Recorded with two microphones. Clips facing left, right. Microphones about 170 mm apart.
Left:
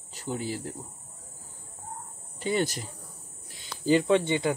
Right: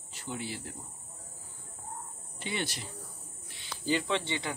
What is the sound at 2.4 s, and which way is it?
Speech, 40° left (ahead or behind).